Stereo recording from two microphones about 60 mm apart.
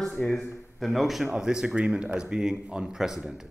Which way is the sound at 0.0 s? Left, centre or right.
Centre.